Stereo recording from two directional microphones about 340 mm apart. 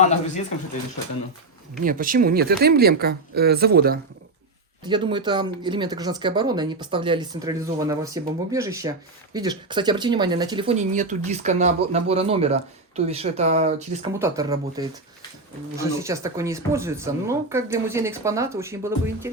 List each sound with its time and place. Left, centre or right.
0.0 s speech: centre
1.8 s speech: right
4.9 s speech: centre
14.1 s speech: centre